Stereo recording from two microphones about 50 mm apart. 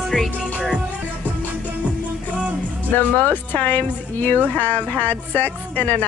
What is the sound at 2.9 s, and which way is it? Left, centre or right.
A woman's voice, left.